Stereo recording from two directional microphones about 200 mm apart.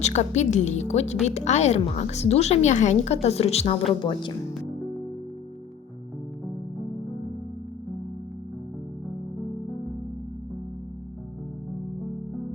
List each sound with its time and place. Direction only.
0.0 s a woman's voice: 35° left (ahead or behind)